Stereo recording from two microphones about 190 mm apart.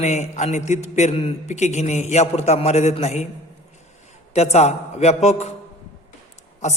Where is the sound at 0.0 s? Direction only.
40° left (ahead or behind).